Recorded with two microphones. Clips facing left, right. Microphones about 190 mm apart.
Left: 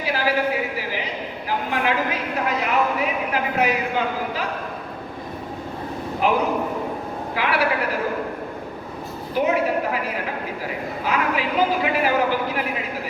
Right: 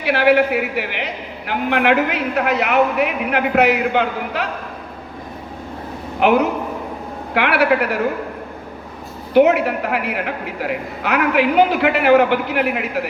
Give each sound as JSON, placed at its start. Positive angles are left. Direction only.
{"t": 0.0, "sound": "a man's voice", "side_deg": -70}
{"t": 6.1, "sound": "a man's voice", "side_deg": -70}
{"t": 9.3, "sound": "a man's voice", "side_deg": -70}